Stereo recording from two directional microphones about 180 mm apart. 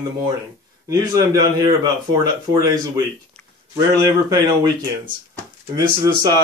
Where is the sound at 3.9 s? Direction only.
20° right (ahead or behind).